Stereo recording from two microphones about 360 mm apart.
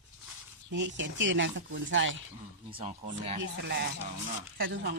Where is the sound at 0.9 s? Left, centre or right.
Right.